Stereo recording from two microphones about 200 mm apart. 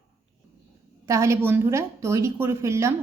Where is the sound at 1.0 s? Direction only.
15° right (ahead or behind).